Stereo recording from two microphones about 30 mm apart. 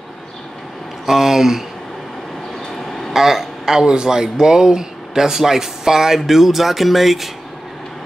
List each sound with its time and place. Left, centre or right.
1.0 s speech: centre
3.1 s speech: centre